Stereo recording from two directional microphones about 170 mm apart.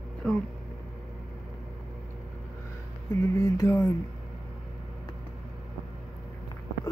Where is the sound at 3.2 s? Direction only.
20° left (ahead or behind).